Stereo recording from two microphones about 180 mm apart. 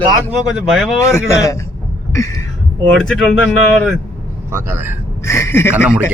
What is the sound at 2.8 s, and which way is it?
Speech, 5° left (ahead or behind).